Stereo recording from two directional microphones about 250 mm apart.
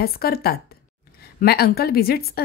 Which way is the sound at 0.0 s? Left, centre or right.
Left.